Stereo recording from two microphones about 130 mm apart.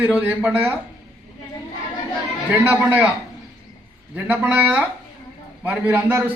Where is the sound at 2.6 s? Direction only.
15° right (ahead or behind).